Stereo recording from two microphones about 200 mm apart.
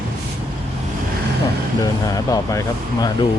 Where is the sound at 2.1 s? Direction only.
15° left (ahead or behind).